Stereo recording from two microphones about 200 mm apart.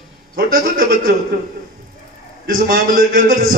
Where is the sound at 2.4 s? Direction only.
50° right (ahead or behind).